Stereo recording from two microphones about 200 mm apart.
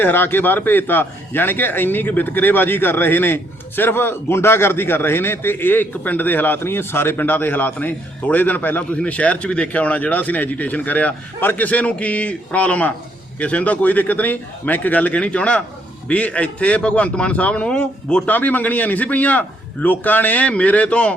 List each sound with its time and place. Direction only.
0.0 s a man's voice: 10° left (ahead or behind)